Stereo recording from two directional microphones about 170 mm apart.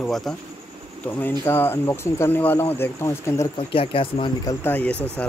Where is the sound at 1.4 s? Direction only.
15° left (ahead or behind).